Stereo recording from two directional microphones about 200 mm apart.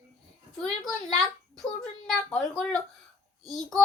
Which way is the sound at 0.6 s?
Centre (ahead or behind).